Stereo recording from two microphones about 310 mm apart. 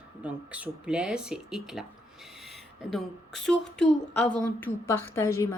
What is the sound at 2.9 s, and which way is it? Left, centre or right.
Speech, centre.